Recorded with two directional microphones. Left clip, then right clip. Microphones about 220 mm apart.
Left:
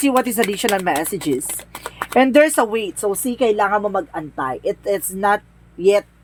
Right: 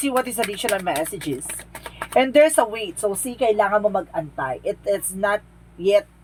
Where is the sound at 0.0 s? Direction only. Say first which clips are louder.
Left 5 dB; 50° left (ahead or behind).